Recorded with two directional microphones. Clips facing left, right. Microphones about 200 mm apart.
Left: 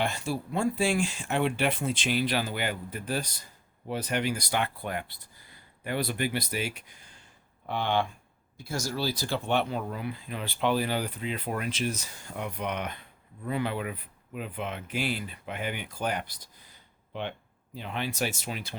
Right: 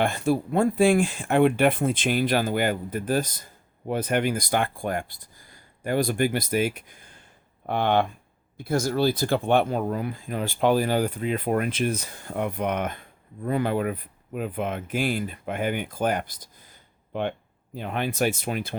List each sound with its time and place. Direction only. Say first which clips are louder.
0.0 s speech: right 7 dB; 55° right (ahead or behind)